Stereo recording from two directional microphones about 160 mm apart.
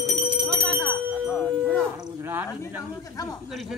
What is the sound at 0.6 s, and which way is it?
Bell, 5° left (ahead or behind).